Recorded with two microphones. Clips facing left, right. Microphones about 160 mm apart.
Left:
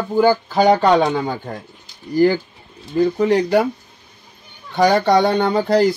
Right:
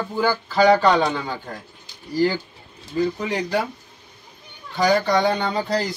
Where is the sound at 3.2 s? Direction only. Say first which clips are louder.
Left 9 dB; 55° left (ahead or behind).